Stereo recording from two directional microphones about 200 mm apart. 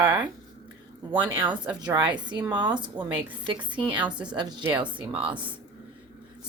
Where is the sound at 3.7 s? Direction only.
5° right (ahead or behind).